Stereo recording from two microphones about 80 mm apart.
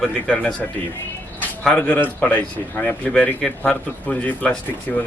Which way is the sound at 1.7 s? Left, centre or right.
Left.